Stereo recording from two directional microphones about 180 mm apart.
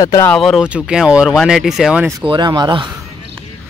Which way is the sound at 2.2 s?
25° right (ahead or behind).